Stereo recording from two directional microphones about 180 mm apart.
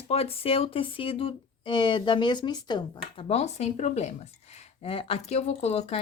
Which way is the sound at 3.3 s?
35° left (ahead or behind).